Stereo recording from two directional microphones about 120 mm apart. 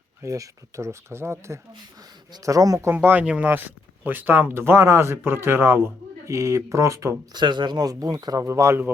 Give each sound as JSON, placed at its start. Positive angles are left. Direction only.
{"t": 0.2, "sound": "speech", "side_deg": -25}
{"t": 2.9, "sound": "speech", "side_deg": -15}
{"t": 7.3, "sound": "speech", "side_deg": -40}